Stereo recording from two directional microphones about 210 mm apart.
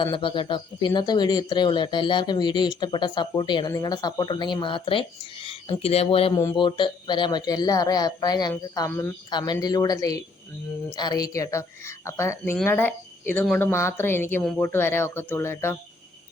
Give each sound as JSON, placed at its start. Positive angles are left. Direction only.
{"t": 0.0, "sound": "speech", "side_deg": 25}